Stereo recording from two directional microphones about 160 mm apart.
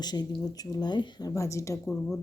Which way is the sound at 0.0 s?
25° left (ahead or behind).